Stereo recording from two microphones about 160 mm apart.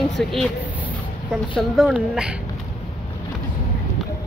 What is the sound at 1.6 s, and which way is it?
Speech, 5° right (ahead or behind).